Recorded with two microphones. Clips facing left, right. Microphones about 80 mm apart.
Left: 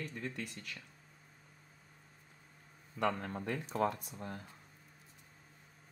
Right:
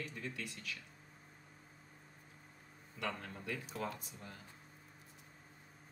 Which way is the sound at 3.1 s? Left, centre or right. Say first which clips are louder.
Left 5 dB; left.